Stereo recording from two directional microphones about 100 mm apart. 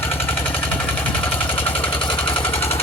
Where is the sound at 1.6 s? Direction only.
20° left (ahead or behind).